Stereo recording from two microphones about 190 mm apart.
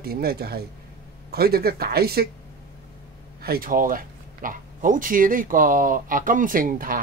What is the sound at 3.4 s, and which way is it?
Speech, 50° right (ahead or behind).